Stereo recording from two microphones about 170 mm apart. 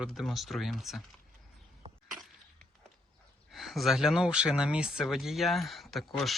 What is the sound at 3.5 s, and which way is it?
Speech, centre (ahead or behind).